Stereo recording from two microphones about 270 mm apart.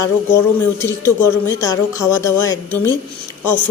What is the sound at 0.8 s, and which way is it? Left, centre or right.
Speech, centre.